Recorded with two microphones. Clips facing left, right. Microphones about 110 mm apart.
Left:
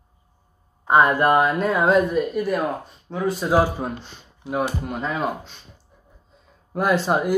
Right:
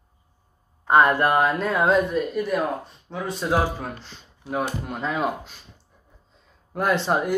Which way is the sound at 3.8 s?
20° left (ahead or behind).